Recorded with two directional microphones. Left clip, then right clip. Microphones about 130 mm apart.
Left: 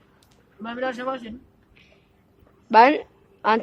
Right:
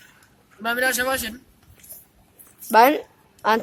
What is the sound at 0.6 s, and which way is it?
Speech, 25° right (ahead or behind).